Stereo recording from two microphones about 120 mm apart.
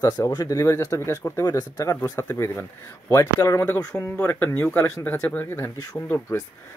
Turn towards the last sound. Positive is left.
turn(degrees=25)  # may be behind; listen again after turning